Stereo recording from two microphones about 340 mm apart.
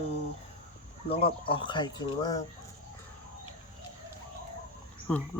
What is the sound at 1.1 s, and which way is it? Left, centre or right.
Speech, centre.